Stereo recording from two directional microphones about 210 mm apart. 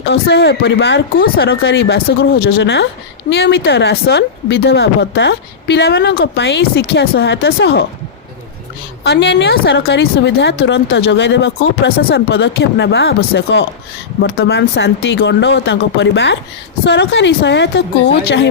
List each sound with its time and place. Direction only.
0.0 s speech: 55° left (ahead or behind)
9.0 s a woman's voice: 55° left (ahead or behind)